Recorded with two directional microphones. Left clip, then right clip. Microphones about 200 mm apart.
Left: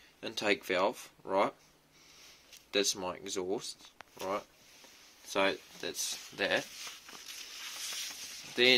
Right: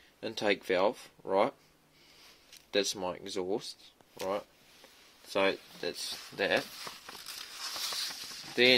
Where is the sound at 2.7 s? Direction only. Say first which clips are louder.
Right 1 dB; 30° right (ahead or behind).